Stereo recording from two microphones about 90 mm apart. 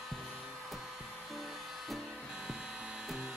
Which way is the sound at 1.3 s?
Centre (ahead or behind).